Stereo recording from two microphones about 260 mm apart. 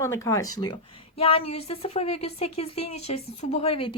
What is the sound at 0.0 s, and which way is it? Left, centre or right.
A woman's voice, centre.